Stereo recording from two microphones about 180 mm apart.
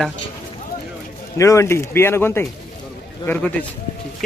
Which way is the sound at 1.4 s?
15° left (ahead or behind).